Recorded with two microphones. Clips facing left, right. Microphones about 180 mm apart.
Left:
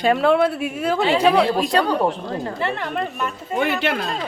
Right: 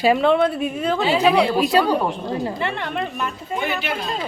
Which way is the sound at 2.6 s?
Centre (ahead or behind).